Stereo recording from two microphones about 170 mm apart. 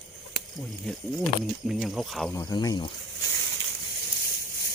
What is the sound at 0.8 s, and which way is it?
Speech, centre (ahead or behind).